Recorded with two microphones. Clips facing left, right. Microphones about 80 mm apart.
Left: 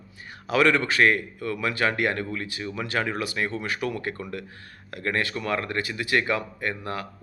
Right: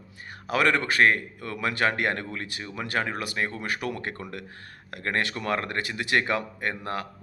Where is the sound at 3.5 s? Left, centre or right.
Right.